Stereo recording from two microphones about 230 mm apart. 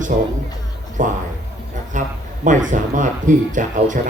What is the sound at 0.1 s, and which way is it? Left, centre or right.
Speech, right.